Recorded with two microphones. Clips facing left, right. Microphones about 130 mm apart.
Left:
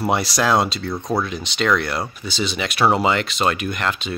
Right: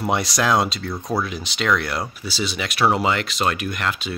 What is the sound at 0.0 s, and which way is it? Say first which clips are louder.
Speech: left 2 dB; centre (ahead or behind).